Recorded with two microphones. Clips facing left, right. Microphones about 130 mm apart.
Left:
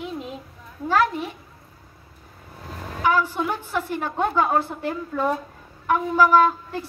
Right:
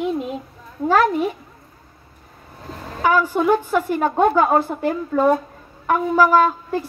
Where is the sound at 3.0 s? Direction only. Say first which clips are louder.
Right 5 dB; 50° right (ahead or behind).